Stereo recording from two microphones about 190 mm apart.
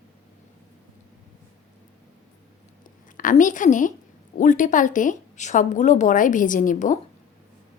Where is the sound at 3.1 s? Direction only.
45° left (ahead or behind).